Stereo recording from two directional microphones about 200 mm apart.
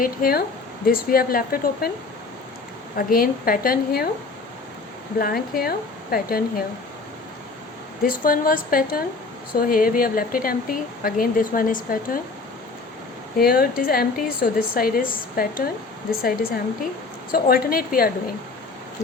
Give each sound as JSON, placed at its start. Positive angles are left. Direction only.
{"t": 0.0, "sound": "speech", "side_deg": 45}
{"t": 3.1, "sound": "speech", "side_deg": 45}
{"t": 5.2, "sound": "speech", "side_deg": 45}
{"t": 8.0, "sound": "speech", "side_deg": 45}
{"t": 13.4, "sound": "speech", "side_deg": 45}